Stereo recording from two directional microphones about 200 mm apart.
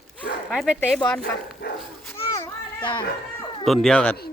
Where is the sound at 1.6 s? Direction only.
50° left (ahead or behind).